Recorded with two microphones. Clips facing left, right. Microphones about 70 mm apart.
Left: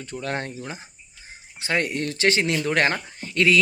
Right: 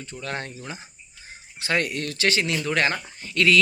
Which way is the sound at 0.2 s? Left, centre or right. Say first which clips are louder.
Left 3 dB; left.